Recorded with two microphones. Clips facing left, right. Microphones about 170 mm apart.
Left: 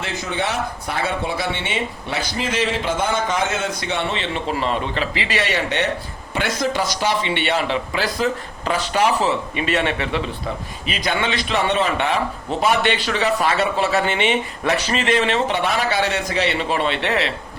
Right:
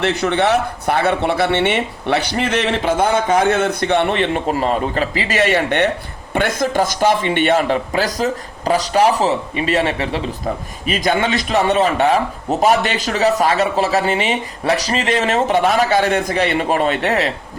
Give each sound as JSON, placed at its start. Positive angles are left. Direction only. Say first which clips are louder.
{"t": 0.0, "sound": "speech", "louder": "right 8 dB", "side_deg": -70}